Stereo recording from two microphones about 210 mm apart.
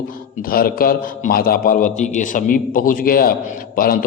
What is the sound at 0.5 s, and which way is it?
A man's voice, 45° left (ahead or behind).